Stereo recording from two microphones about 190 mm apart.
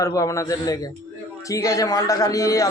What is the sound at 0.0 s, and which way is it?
A man's voice, 15° left (ahead or behind).